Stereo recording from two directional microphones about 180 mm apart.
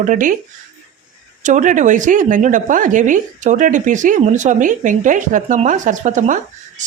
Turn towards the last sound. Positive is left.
turn(degrees=-45)  # may be behind; listen again after turning